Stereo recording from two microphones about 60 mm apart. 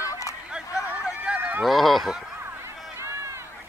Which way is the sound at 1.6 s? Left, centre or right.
Centre.